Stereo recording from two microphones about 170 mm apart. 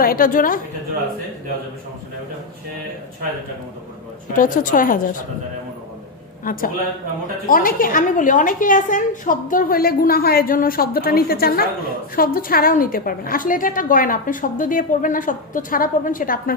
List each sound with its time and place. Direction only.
0.0 s a woman's voice: 55° left (ahead or behind)
4.4 s a woman's voice: 50° left (ahead or behind)
6.4 s a man's voice: 55° left (ahead or behind)